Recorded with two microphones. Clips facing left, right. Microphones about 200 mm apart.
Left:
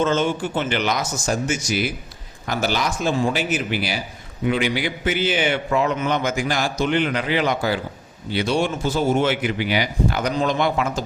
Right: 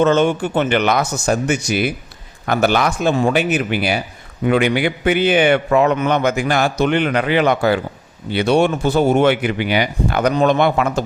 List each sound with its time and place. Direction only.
0.0 s a man's voice: 65° right (ahead or behind)